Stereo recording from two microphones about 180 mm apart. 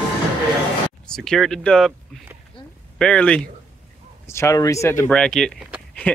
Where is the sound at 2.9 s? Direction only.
5° left (ahead or behind).